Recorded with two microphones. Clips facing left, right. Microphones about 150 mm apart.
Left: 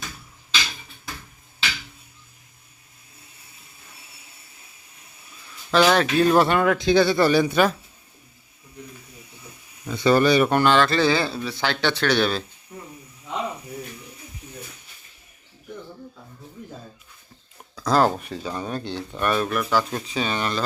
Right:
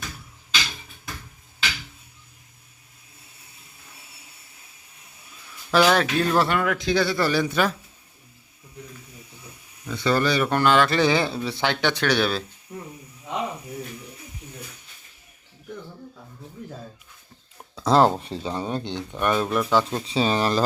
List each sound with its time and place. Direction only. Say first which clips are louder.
5.7 s speech: left 1 dB; centre (ahead or behind)
6.3 s speech: left 4 dB; 25° left (ahead or behind)
9.9 s speech: left 5 dB; 15° left (ahead or behind)
10.6 s speech: left 1 dB; 5° right (ahead or behind)
10.8 s speech: even; 15° right (ahead or behind)
17.7 s speech: right 2 dB; 25° right (ahead or behind)